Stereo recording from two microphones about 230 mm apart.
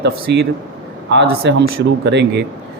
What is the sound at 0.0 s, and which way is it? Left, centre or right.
A man's voice, right.